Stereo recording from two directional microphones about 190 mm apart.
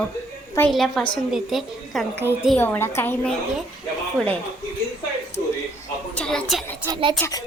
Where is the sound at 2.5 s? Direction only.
10° left (ahead or behind).